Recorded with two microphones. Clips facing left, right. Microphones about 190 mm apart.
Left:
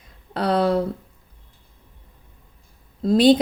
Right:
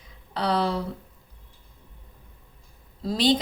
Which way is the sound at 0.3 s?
55° left (ahead or behind).